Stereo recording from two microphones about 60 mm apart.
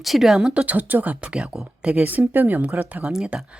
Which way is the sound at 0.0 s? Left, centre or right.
Centre.